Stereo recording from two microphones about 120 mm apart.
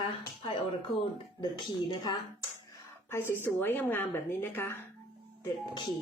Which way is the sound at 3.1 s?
15° left (ahead or behind).